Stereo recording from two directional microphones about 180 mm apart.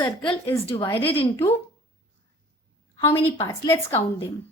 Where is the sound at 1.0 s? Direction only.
30° left (ahead or behind).